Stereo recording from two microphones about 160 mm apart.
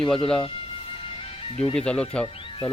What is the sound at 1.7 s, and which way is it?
Speech, 5° left (ahead or behind).